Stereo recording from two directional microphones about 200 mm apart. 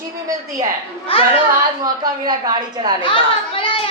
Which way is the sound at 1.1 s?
30° left (ahead or behind).